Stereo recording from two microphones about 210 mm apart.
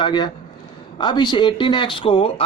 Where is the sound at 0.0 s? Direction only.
20° left (ahead or behind).